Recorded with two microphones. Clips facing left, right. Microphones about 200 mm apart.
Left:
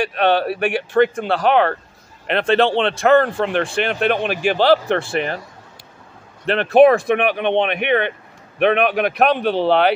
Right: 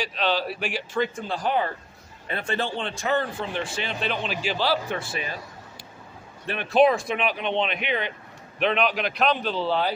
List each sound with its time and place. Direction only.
0.0 s speech: 60° left (ahead or behind)
6.4 s speech: 70° left (ahead or behind)